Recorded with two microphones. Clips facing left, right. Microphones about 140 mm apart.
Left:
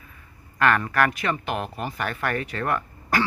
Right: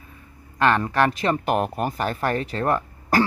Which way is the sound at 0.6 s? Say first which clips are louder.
Right 2 dB; 25° right (ahead or behind).